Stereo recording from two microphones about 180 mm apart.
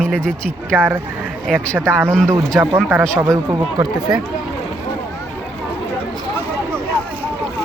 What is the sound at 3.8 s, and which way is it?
Speech, centre (ahead or behind).